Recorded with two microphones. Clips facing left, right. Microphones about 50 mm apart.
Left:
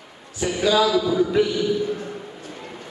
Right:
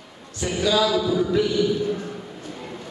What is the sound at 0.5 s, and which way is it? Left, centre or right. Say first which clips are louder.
Speech: left 2 dB; centre.